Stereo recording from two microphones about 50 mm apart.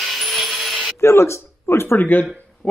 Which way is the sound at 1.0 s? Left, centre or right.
Left.